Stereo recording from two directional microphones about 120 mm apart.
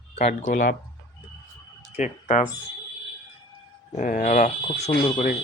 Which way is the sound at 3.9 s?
90° left.